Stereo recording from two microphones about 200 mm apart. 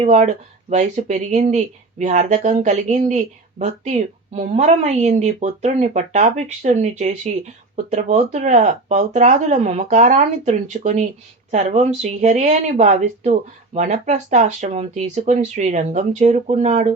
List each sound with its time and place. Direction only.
0.0 s speech: 35° right (ahead or behind)